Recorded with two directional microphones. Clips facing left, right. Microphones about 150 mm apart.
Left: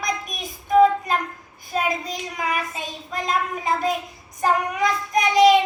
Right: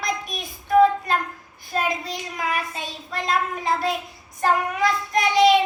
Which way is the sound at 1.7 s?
Centre (ahead or behind).